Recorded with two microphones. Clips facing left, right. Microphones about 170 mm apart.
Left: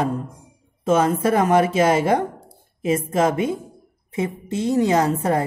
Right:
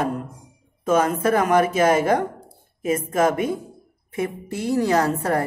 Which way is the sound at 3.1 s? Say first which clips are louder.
Right 1 dB; 25° left (ahead or behind).